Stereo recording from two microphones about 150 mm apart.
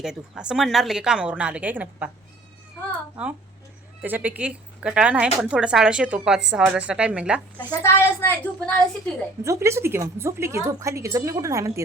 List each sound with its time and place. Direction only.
0.0 s a woman's voice: 5° right (ahead or behind)
4.0 s a woman's voice: 10° right (ahead or behind)
7.7 s a woman's voice: 20° left (ahead or behind)
9.4 s a woman's voice: 20° right (ahead or behind)